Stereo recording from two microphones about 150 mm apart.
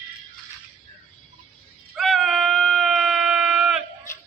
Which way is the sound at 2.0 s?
Centre (ahead or behind).